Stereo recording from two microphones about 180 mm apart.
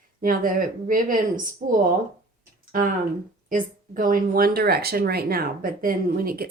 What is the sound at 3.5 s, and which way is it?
Speech, 50° right (ahead or behind).